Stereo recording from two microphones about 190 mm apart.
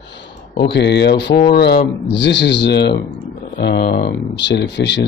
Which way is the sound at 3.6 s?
50° left (ahead or behind).